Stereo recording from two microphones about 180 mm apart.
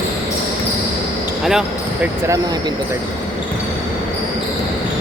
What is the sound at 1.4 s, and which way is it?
Speech, centre (ahead or behind).